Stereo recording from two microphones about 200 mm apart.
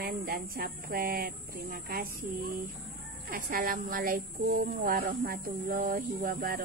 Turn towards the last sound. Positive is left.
turn(degrees=-45)  # may be behind; listen again after turning